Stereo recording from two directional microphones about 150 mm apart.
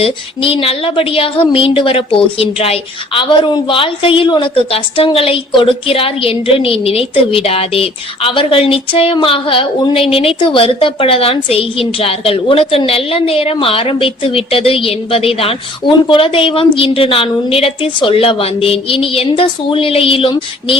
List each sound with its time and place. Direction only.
0.0 s a woman's voice: 40° left (ahead or behind)